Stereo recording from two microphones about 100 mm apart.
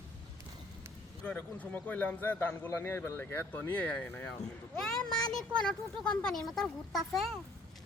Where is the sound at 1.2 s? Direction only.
15° left (ahead or behind).